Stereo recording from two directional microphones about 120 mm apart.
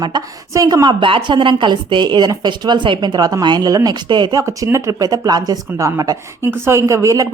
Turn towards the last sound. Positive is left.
turn(degrees=-25)  # may be behind; listen again after turning